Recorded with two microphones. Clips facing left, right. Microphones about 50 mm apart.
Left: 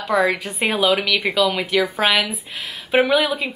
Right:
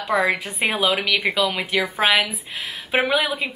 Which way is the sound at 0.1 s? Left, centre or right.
Centre.